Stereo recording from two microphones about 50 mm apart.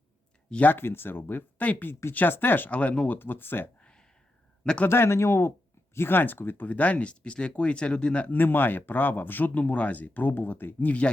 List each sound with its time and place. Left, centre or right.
0.5 s speech: left
0.8 s speech: left
1.6 s speech: left
2.1 s speech: left
4.9 s speech: left
6.7 s speech: left
8.3 s speech: left
9.6 s speech: left